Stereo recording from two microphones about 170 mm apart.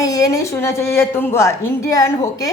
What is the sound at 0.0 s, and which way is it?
A woman's voice, 20° left (ahead or behind).